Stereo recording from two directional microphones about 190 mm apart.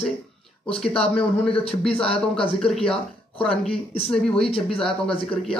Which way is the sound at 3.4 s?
30° left (ahead or behind).